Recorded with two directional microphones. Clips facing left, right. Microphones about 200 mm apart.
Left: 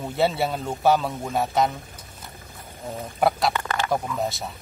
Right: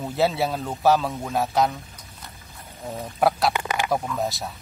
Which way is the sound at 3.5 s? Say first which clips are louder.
Right 1 dB; 15° right (ahead or behind).